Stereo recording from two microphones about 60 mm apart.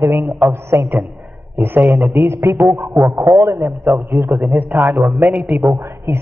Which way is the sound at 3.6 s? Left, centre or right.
Right.